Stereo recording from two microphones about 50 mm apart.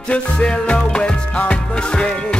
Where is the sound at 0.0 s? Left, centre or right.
Left.